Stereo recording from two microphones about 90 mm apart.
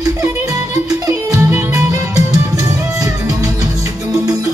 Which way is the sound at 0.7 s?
35° right (ahead or behind).